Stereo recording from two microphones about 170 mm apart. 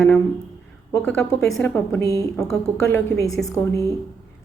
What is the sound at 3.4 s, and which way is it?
Speech, 20° left (ahead or behind).